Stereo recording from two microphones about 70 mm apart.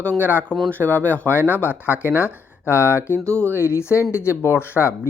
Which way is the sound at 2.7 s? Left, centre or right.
Left.